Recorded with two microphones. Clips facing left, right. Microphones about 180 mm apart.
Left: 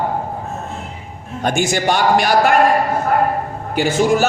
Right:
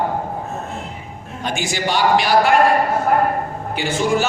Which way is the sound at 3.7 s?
45° left (ahead or behind).